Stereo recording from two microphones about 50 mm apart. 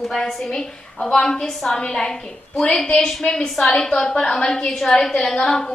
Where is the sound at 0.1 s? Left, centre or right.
Centre.